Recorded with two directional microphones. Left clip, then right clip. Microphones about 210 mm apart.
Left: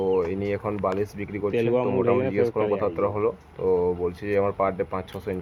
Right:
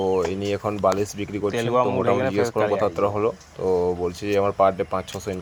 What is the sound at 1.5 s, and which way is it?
Speech, centre (ahead or behind).